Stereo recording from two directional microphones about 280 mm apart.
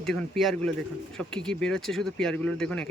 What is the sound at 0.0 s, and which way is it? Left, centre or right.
Speech, centre.